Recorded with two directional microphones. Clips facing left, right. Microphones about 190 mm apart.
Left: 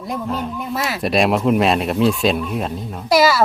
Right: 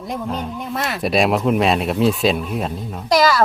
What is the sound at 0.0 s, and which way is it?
Speech, centre (ahead or behind).